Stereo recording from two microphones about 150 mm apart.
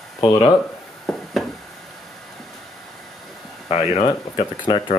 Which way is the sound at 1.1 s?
Centre (ahead or behind).